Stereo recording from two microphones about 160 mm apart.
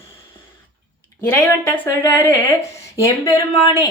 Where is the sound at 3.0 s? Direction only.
20° left (ahead or behind).